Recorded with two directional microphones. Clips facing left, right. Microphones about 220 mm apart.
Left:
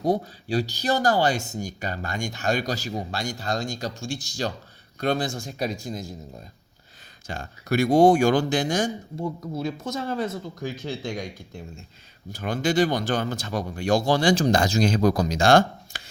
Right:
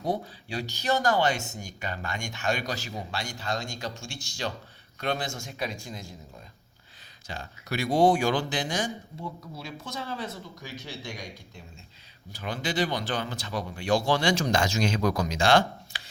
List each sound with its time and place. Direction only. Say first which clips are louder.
0.0 s speech: left 6 dB; 40° left (ahead or behind)
7.3 s speech: left 8 dB; 50° left (ahead or behind)